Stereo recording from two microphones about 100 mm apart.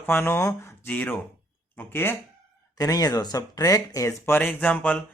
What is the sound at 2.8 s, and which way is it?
Speech, 35° left (ahead or behind).